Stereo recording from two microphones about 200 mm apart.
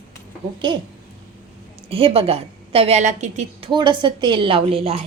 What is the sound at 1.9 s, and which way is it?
A woman's voice, 30° right (ahead or behind).